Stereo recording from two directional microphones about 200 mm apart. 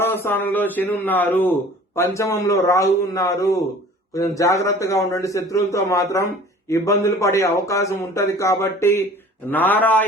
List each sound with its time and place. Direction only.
0.0 s a man's voice: 10° left (ahead or behind)